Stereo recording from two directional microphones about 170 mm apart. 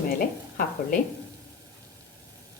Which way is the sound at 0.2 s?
55° left (ahead or behind).